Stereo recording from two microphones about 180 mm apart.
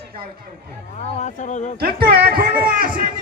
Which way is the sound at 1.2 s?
45° left (ahead or behind).